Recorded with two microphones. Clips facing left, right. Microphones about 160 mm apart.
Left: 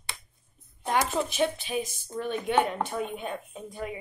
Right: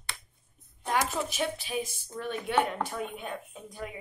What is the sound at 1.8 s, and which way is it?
Speech, 20° left (ahead or behind).